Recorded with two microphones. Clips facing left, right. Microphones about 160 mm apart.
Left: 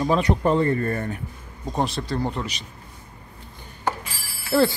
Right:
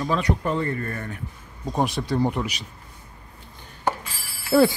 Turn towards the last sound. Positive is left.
turn(degrees=-10)  # may be behind; listen again after turning